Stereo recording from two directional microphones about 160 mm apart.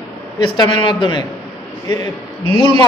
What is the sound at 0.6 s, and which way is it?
Speech, 30° left (ahead or behind).